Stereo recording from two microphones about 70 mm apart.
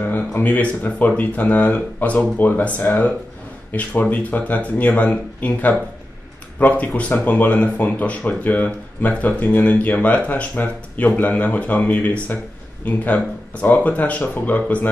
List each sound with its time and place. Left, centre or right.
0.0 s speech: left